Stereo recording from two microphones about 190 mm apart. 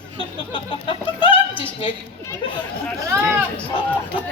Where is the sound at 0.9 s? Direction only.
25° left (ahead or behind).